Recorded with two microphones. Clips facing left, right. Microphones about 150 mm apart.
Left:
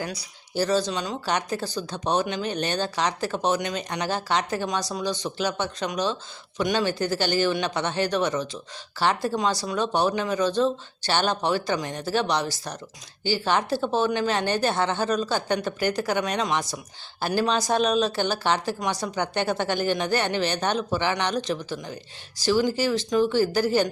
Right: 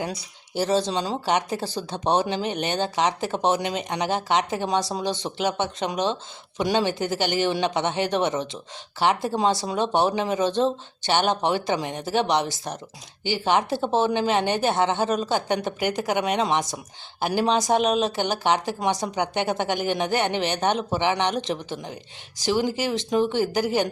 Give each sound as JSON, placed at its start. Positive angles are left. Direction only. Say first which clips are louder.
{"t": 0.0, "sound": "speech", "louder": "right 2 dB", "side_deg": -25}